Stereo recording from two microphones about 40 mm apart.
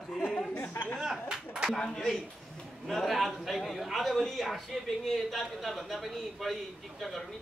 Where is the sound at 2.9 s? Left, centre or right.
Centre.